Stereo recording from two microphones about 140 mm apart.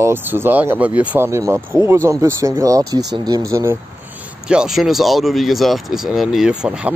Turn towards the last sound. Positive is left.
turn(degrees=-5)  # may be behind; listen again after turning